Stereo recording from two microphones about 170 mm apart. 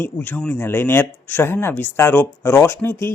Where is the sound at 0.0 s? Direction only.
10° left (ahead or behind).